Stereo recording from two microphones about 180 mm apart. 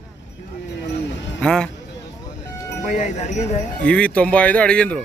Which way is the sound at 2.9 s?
40° left (ahead or behind).